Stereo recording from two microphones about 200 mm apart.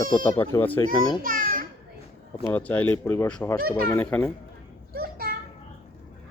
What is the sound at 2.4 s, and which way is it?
Speech, 5° left (ahead or behind).